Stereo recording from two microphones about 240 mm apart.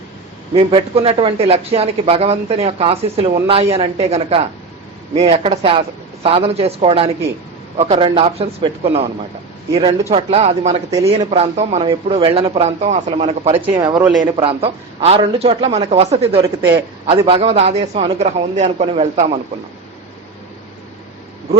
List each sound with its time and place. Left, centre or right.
0.5 s speech: right
10.1 s speech: right